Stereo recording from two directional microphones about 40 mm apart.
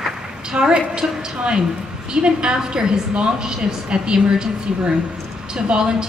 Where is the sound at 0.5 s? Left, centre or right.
Right.